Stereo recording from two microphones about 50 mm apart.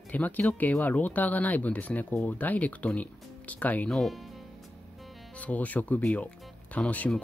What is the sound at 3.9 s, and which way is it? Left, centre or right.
Speech, centre.